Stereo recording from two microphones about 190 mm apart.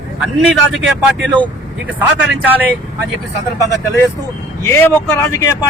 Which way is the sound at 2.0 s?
10° right (ahead or behind).